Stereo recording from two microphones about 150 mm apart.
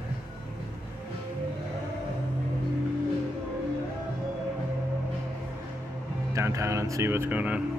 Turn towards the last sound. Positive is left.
turn(degrees=-10)  # may be behind; listen again after turning